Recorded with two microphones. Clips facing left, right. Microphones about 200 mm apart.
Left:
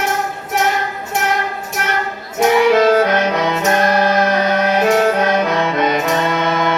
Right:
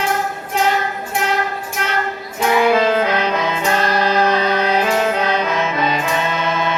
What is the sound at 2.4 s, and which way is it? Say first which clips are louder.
Music: left 3 dB; 40° left (ahead or behind).